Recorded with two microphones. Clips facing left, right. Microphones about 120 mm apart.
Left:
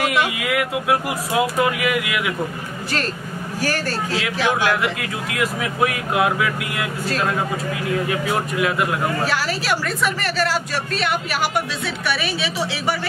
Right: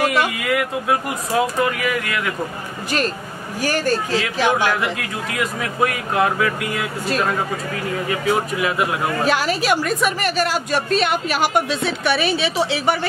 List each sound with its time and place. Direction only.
0.0 s speech: 5° left (ahead or behind)
3.6 s a man's voice: 15° right (ahead or behind)
4.5 s speech: centre (ahead or behind)
8.1 s speech: centre (ahead or behind)
9.2 s speech: 20° right (ahead or behind)